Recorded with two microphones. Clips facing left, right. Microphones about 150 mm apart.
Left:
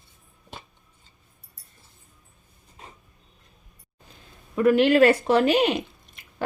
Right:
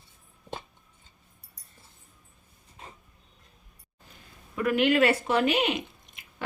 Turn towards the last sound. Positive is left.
turn(degrees=35)  # may be behind; listen again after turning